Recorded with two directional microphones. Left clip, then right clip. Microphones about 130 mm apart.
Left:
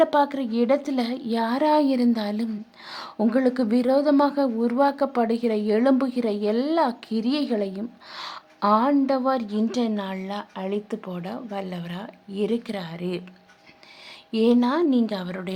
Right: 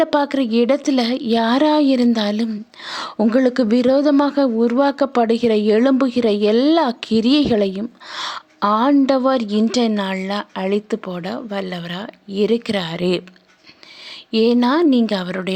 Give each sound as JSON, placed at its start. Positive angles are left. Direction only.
{"t": 0.0, "sound": "a woman's voice", "side_deg": -30}
{"t": 14.3, "sound": "speech", "side_deg": -30}